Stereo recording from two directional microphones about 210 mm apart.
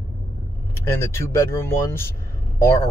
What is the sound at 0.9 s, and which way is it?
Speech, 15° left (ahead or behind).